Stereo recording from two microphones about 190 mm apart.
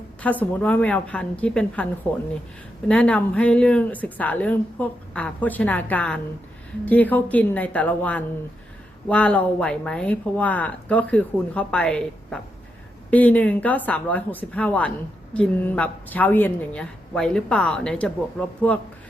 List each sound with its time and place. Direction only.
0.2 s speech: 10° left (ahead or behind)